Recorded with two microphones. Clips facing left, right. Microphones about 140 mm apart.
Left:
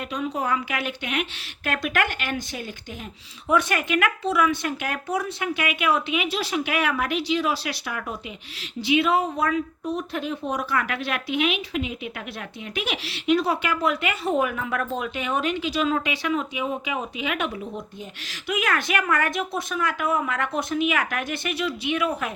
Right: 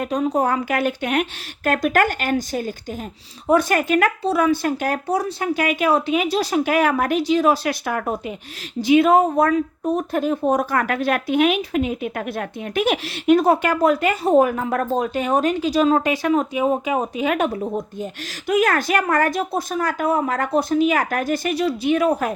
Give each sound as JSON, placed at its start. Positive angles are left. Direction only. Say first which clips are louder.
{"t": 0.0, "sound": "a woman's voice", "louder": "right 8 dB", "side_deg": -45}